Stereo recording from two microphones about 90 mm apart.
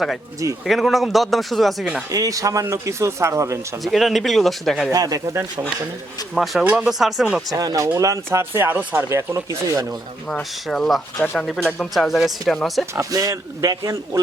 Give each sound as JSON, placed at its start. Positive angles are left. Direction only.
{"t": 0.6, "sound": "speech", "side_deg": 0}
{"t": 2.1, "sound": "speech", "side_deg": -40}
{"t": 3.8, "sound": "speech", "side_deg": 0}
{"t": 4.9, "sound": "speech", "side_deg": -45}
{"t": 6.3, "sound": "speech", "side_deg": 0}
{"t": 7.5, "sound": "speech", "side_deg": -40}
{"t": 9.0, "sound": "speech", "side_deg": -30}
{"t": 10.2, "sound": "speech", "side_deg": 5}
{"t": 13.0, "sound": "speech", "side_deg": -40}